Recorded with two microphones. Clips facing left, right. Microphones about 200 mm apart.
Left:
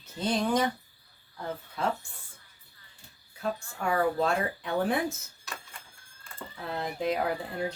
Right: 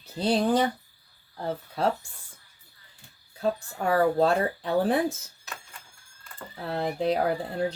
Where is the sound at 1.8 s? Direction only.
35° right (ahead or behind).